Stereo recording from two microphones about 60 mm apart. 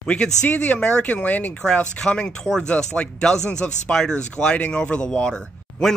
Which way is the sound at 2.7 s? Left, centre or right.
Centre.